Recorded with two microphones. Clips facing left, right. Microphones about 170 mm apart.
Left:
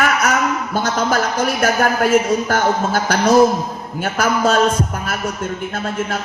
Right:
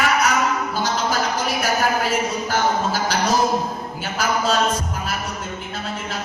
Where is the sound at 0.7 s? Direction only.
55° left (ahead or behind).